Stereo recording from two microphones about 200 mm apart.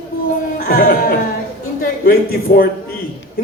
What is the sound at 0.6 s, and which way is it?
Speech, 45° left (ahead or behind).